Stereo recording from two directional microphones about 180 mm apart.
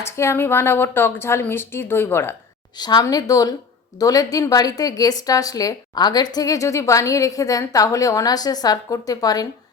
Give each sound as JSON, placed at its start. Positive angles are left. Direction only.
{"t": 0.0, "sound": "a woman's voice", "side_deg": 15}